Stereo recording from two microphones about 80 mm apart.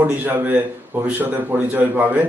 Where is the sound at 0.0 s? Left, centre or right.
Right.